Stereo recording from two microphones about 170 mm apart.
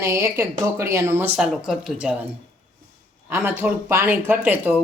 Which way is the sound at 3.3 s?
15° right (ahead or behind).